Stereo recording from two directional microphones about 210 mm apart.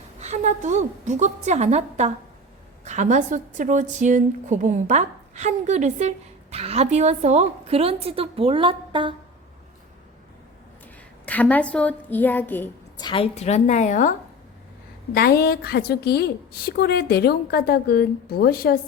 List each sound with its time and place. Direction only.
0.2 s a woman's voice: 35° right (ahead or behind)
11.3 s a woman's voice: 5° left (ahead or behind)
13.0 s a woman's voice: 25° left (ahead or behind)
15.1 s a woman's voice: 45° left (ahead or behind)